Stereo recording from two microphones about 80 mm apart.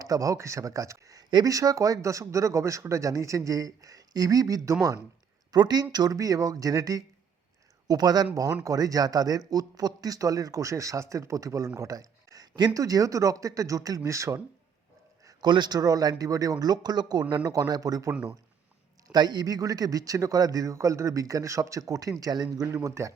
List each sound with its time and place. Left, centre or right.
0.0 s speech: right
5.5 s speech: right
15.4 s a man's voice: right
15.8 s speech: right
17.5 s speech: right
19.0 s speech: right
22.6 s speech: right